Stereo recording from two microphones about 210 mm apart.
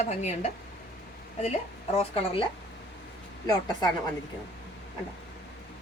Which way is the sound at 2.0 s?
25° left (ahead or behind).